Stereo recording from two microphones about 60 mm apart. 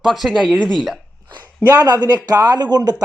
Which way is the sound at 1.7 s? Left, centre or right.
Right.